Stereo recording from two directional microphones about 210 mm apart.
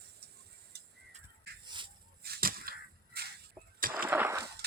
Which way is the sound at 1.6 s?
20° right (ahead or behind).